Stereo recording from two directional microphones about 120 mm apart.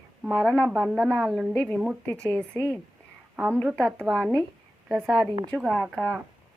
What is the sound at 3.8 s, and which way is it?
Speech, 10° left (ahead or behind).